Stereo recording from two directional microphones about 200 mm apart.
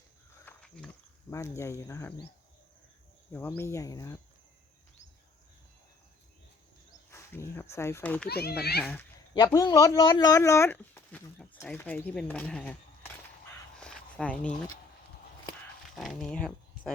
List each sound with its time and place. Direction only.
0.4 s a sound: 5° left (ahead or behind)
1.3 s speech: 15° left (ahead or behind)
3.3 s speech: 10° left (ahead or behind)
7.1 s speech: 15° left (ahead or behind)
8.3 s a child's voice: 50° left (ahead or behind)
8.8 s speech: 5° left (ahead or behind)
9.3 s speech: 20° left (ahead or behind); by 13.1 s 5° left (ahead or behind)
13.7 s a sound: 5° left (ahead or behind)
16.0 s speech: centre (ahead or behind)